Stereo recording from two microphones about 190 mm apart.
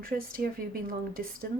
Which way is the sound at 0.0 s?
50° right (ahead or behind).